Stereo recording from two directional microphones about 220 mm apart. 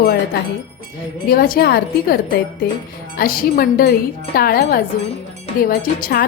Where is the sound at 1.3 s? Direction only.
45° left (ahead or behind).